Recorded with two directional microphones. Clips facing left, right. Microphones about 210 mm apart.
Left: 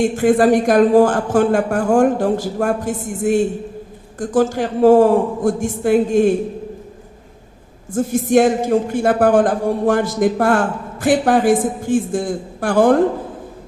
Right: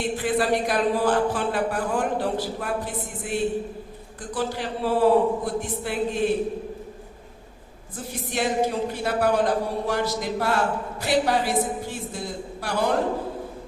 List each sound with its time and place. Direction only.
0.0 s a man's voice: 45° left (ahead or behind)
7.9 s a man's voice: 45° left (ahead or behind)